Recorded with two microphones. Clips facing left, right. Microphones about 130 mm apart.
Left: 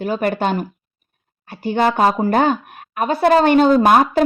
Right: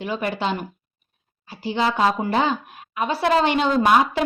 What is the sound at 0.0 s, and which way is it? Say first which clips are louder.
A woman's voice: left 6 dB; 45° left (ahead or behind).